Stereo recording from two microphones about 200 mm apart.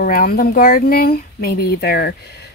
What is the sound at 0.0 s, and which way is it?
A woman's voice, 45° left (ahead or behind).